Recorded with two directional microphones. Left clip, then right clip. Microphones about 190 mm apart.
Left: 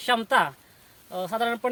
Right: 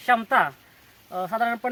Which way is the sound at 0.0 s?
45° left (ahead or behind).